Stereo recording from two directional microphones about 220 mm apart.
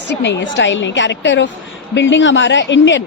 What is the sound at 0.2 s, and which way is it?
A woman's voice, 55° left (ahead or behind).